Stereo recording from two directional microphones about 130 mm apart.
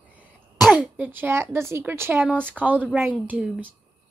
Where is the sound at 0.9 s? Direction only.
15° right (ahead or behind).